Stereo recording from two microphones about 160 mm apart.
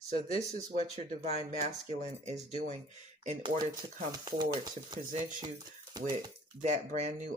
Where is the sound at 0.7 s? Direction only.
40° right (ahead or behind).